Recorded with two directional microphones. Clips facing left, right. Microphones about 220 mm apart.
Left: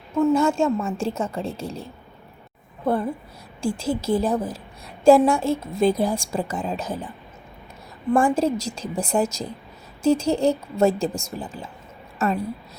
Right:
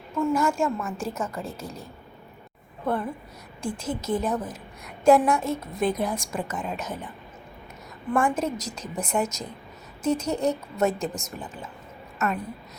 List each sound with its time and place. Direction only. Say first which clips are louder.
0.2 s a woman's voice: left 5 dB; 20° left (ahead or behind)
8.1 s a woman's voice: left 5 dB; 30° left (ahead or behind)